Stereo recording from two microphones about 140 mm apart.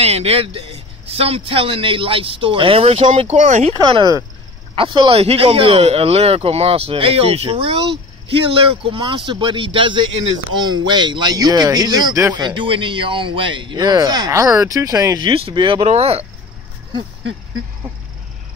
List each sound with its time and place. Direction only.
0.0 s a man's voice: 45° right (ahead or behind)
3.7 s a man's voice: 30° right (ahead or behind)
15.9 s a man's voice: 45° right (ahead or behind)